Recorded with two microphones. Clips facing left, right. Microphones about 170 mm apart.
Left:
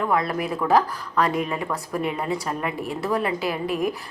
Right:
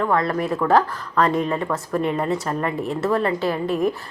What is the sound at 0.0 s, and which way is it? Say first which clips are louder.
A woman's voice: right 3 dB; 10° left (ahead or behind).